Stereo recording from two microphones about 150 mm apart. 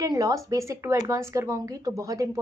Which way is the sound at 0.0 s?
20° right (ahead or behind).